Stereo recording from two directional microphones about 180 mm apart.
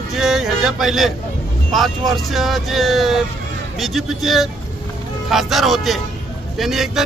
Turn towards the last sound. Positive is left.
turn(degrees=0)  # may be behind; listen again after turning